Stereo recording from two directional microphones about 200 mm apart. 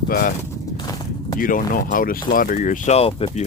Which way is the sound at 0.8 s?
20° left (ahead or behind).